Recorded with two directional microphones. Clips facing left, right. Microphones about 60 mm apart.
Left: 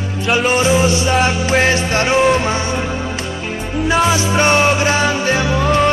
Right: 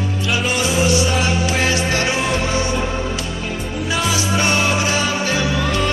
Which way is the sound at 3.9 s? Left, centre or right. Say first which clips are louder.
Left 6 dB; left.